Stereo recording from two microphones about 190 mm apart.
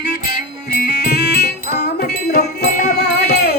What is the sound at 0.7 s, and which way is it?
Music, 55° left (ahead or behind).